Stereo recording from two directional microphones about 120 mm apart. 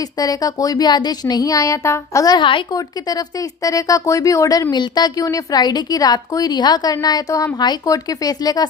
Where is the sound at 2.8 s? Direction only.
30° left (ahead or behind).